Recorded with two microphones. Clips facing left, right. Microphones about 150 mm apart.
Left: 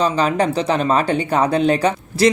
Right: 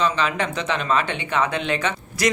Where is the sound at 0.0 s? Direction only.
40° left (ahead or behind).